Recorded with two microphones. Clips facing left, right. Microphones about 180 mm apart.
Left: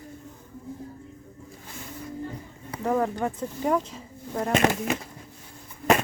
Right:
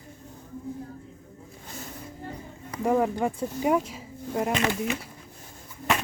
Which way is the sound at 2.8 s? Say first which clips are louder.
Right 2 dB; 10° right (ahead or behind).